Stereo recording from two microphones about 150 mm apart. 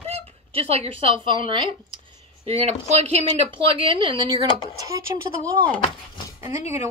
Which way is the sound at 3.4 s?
35° right (ahead or behind).